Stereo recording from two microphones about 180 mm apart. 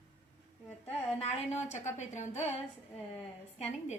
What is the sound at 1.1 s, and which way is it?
A woman's voice, 40° left (ahead or behind).